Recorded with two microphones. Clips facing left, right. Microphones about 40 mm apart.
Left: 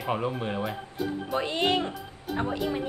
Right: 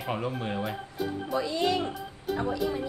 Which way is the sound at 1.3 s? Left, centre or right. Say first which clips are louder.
Left 1 dB; left.